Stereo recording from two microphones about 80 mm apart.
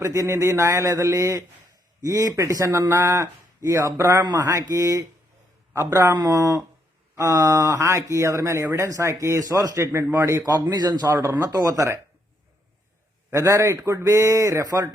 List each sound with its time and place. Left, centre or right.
0.0 s a man's voice: right
13.3 s speech: right